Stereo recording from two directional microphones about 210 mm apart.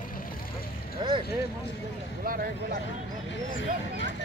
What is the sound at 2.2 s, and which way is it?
Speech, 45° right (ahead or behind).